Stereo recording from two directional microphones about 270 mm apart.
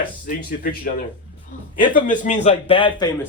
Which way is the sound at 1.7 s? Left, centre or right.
Left.